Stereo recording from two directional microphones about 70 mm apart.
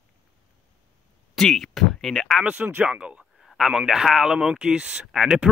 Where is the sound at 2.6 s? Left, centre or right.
Right.